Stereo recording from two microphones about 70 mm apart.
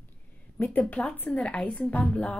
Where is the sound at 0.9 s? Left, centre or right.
Centre.